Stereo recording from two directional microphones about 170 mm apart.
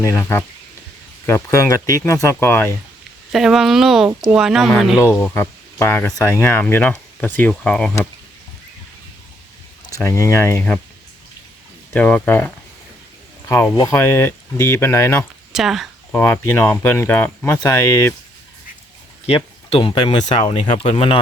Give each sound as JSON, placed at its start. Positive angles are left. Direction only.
{"t": 0.0, "sound": "speech", "side_deg": 15}
{"t": 3.3, "sound": "speech", "side_deg": 0}
{"t": 5.3, "sound": "speech", "side_deg": 15}
{"t": 9.9, "sound": "speech", "side_deg": 20}
{"t": 11.9, "sound": "speech", "side_deg": 10}
{"t": 13.7, "sound": "speech", "side_deg": 20}
{"t": 15.5, "sound": "speech", "side_deg": 0}
{"t": 16.1, "sound": "speech", "side_deg": 10}
{"t": 19.2, "sound": "speech", "side_deg": 35}